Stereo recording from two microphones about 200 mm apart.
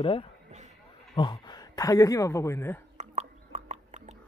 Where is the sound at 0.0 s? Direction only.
25° left (ahead or behind).